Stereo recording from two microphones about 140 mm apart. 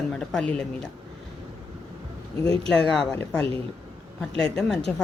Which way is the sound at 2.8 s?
5° left (ahead or behind).